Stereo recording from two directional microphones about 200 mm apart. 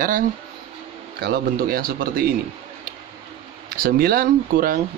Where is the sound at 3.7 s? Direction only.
45° right (ahead or behind).